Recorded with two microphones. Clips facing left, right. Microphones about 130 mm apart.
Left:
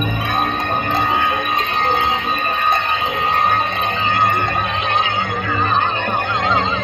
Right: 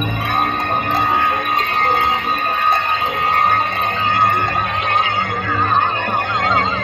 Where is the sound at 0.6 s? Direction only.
40° right (ahead or behind).